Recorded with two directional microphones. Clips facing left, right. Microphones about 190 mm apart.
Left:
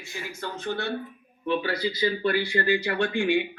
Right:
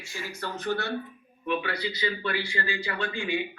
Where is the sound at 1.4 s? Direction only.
40° left (ahead or behind); by 3.6 s 75° left (ahead or behind).